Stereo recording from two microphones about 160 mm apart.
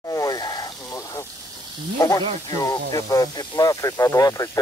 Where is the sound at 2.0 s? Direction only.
20° left (ahead or behind).